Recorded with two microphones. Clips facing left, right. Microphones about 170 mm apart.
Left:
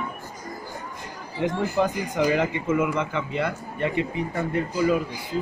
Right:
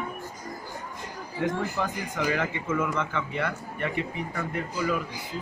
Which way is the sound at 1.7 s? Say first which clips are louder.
Left 7 dB; 15° left (ahead or behind).